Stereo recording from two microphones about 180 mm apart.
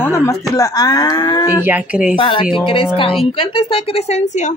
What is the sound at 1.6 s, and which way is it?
Speech, 10° right (ahead or behind).